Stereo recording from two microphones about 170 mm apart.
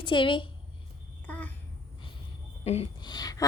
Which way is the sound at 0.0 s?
30° left (ahead or behind).